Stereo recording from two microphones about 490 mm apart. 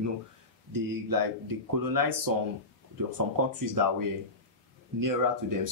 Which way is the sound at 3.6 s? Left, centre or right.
Right.